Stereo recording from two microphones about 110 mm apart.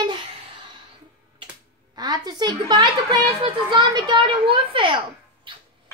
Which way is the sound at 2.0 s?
40° right (ahead or behind).